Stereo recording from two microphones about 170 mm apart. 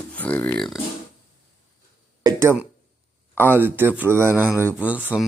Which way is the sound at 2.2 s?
20° right (ahead or behind).